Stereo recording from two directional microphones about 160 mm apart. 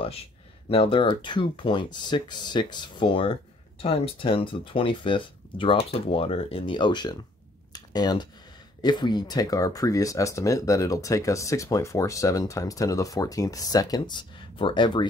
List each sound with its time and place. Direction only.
0.7 s speech: 35° left (ahead or behind)
7.7 s a sound: 25° left (ahead or behind)
8.8 s speech: 25° left (ahead or behind)